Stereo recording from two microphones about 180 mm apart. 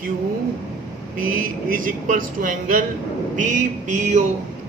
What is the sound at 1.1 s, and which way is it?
Speech, 50° right (ahead or behind).